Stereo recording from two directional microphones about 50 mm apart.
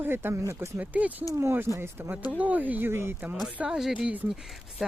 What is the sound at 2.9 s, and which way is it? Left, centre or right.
Speech, right.